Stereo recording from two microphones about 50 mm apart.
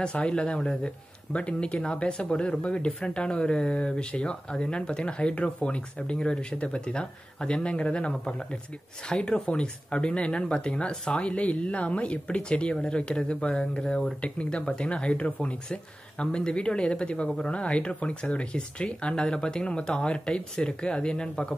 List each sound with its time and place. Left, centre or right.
0.0 s speech: left